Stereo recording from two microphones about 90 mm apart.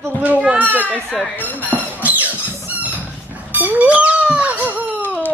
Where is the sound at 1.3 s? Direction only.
20° left (ahead or behind).